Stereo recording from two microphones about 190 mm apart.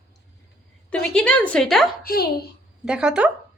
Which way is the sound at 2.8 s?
5° right (ahead or behind).